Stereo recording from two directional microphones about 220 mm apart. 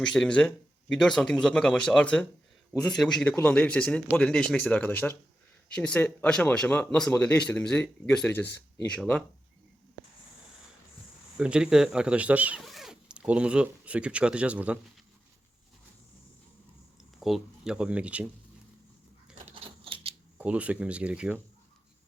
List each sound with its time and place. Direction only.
0.1 s speech: 5° left (ahead or behind)
11.3 s speech: 5° right (ahead or behind)
17.2 s speech: centre (ahead or behind)
19.5 s a sound: 25° right (ahead or behind)
20.4 s speech: 5° right (ahead or behind)